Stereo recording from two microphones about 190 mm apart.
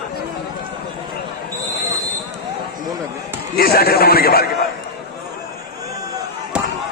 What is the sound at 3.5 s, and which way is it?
Speech, 55° left (ahead or behind).